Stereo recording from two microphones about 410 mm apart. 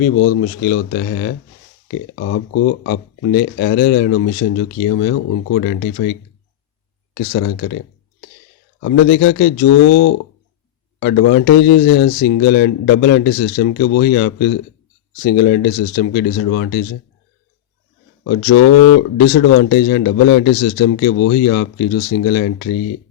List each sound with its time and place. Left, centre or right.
0.3 s speech: left
8.8 s speech: left
9.8 s speech: left
11.0 s speech: left
19.1 s speech: left